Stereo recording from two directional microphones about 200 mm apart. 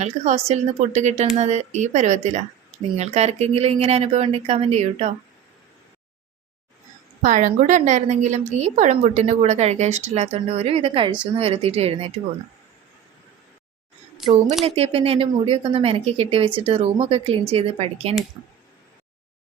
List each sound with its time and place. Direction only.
0.0 s speech: 35° right (ahead or behind)
7.2 s a woman's voice: 40° right (ahead or behind)
14.2 s speech: 5° right (ahead or behind)
14.6 s a woman's voice: 30° right (ahead or behind)